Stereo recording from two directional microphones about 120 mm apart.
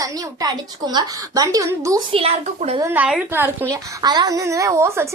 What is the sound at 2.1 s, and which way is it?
Speech, 50° right (ahead or behind).